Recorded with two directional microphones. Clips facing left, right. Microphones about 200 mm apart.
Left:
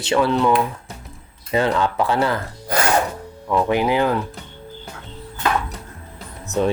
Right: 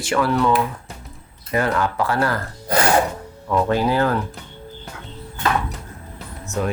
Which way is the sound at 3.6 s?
15° left (ahead or behind).